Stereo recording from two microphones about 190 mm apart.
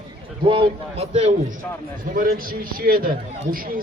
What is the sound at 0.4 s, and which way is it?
Speech, 25° right (ahead or behind).